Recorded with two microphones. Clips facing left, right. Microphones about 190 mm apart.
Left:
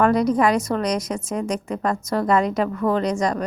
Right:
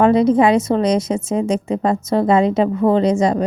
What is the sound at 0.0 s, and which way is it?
A woman's voice, 25° right (ahead or behind).